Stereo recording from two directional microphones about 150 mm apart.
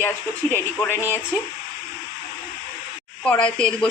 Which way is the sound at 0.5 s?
15° left (ahead or behind).